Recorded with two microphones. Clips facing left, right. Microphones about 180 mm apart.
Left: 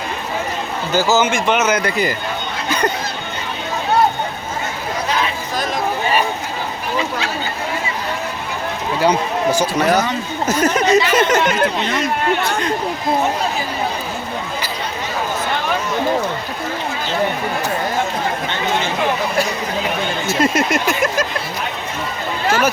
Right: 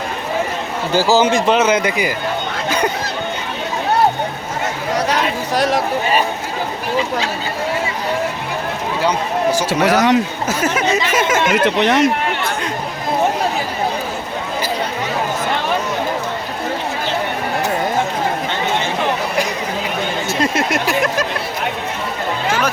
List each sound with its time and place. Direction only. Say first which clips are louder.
0.9 s a man's voice: right 2 dB; 35° right (ahead or behind); by 2.1 s 15° right (ahead or behind)
4.9 s a sound: right 3 dB; 75° right (ahead or behind)
9.6 s speech: right 3 dB; 75° right (ahead or behind)
10.5 s speech: left 4 dB; 5° right (ahead or behind)
11.6 s speech: right 5 dB; 75° right (ahead or behind)
20.2 s a sound: left 3 dB; centre (ahead or behind)